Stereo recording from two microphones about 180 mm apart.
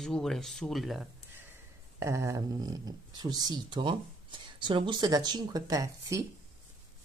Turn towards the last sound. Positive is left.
turn(degrees=-20)  # may be behind; listen again after turning